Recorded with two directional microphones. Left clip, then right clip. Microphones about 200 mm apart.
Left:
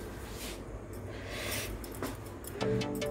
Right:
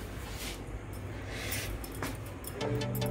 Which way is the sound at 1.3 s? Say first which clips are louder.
Left 1 dB; 50° left (ahead or behind).